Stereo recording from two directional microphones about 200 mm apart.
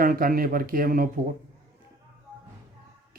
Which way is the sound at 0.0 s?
45° right (ahead or behind).